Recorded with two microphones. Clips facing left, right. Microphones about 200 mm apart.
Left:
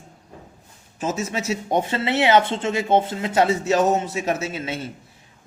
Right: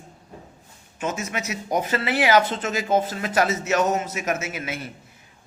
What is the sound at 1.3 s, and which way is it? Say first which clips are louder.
Speech: left 4 dB; 30° left (ahead or behind).